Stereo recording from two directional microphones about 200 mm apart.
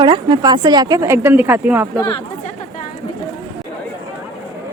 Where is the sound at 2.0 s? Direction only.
20° left (ahead or behind).